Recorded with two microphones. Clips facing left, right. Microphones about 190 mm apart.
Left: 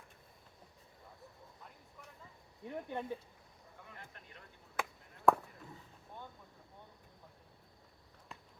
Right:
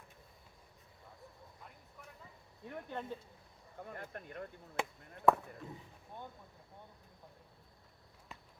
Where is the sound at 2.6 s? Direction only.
15° left (ahead or behind).